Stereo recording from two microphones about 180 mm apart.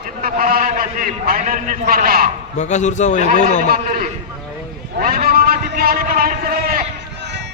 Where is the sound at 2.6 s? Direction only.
40° left (ahead or behind).